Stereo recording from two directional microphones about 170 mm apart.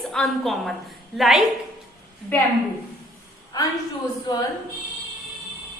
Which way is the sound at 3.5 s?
20° left (ahead or behind).